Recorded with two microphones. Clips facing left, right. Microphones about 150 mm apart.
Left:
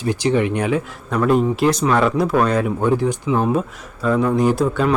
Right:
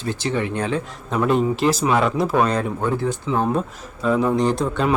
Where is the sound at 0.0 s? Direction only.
15° left (ahead or behind).